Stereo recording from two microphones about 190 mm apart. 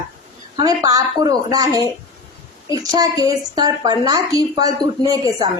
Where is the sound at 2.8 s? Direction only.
20° right (ahead or behind).